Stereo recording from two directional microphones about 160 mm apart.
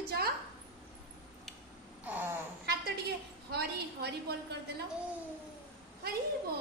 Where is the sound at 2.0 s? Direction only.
10° right (ahead or behind).